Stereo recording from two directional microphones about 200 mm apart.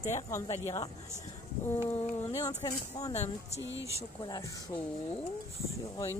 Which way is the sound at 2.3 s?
20° left (ahead or behind).